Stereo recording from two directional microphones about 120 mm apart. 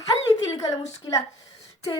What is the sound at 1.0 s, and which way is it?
Speech, 40° left (ahead or behind).